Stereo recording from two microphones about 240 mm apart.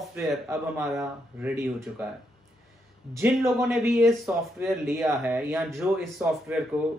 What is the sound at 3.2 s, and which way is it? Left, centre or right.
Speech, centre.